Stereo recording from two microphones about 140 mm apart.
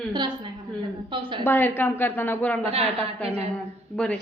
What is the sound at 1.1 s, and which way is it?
Speech, 35° right (ahead or behind).